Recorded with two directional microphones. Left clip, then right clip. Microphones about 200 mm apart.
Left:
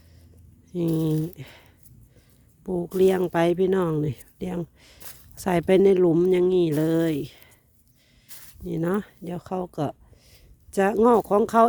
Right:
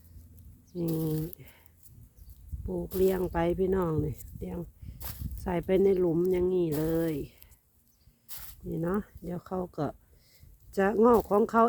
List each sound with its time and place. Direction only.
0.8 s speech: 45° left (ahead or behind)
2.6 s speech: 50° left (ahead or behind); by 4.1 s 30° left (ahead or behind)
4.1 s speech: 45° left (ahead or behind)
8.3 s a sound: 5° left (ahead or behind)
8.7 s speech: 45° left (ahead or behind)
9.2 s speech: 25° left (ahead or behind)